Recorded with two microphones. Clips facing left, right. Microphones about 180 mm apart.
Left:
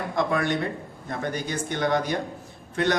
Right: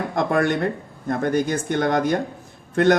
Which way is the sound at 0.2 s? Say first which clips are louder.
Right 4 dB; 50° right (ahead or behind).